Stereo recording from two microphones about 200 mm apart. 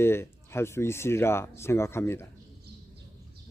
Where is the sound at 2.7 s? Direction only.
55° right (ahead or behind).